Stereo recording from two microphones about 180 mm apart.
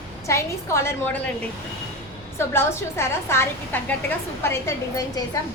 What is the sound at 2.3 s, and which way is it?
A woman's voice, 15° left (ahead or behind).